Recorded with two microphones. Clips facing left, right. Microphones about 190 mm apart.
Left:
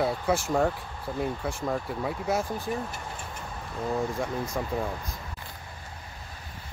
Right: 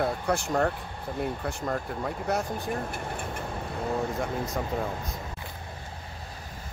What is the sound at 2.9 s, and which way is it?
Vehicle, 55° right (ahead or behind).